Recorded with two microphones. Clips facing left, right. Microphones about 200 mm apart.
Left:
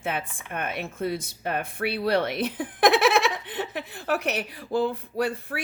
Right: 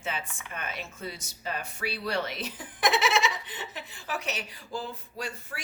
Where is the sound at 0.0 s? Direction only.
60° left (ahead or behind).